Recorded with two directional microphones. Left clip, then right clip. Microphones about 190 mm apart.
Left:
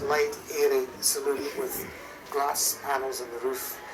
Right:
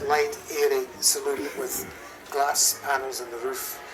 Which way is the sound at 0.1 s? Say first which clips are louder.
Right 3 dB; 30° right (ahead or behind).